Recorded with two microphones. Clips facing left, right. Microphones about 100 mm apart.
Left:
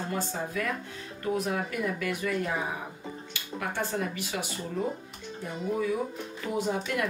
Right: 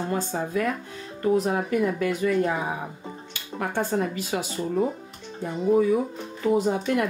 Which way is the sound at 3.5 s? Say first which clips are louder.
Right 6 dB; 35° right (ahead or behind).